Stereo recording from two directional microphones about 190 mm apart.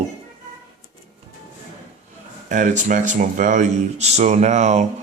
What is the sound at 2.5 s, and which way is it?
Speech, 40° right (ahead or behind).